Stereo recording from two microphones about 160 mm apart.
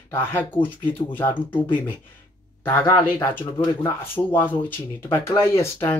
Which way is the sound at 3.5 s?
30° left (ahead or behind).